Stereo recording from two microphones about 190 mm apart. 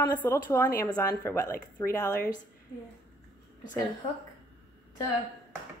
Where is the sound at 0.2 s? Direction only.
10° left (ahead or behind).